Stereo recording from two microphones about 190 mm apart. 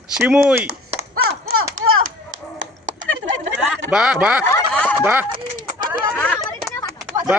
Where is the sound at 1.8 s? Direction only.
90° right.